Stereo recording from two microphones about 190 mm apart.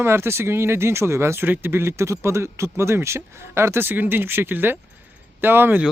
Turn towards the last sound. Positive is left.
turn(degrees=-10)  # may be behind; listen again after turning